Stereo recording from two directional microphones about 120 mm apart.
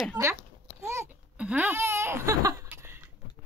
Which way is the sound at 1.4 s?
10° right (ahead or behind).